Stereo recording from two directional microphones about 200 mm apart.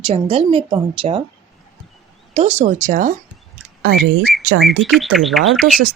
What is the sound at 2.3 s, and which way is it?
Speech, 35° right (ahead or behind).